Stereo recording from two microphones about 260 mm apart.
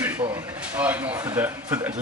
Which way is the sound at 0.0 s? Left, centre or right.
Centre.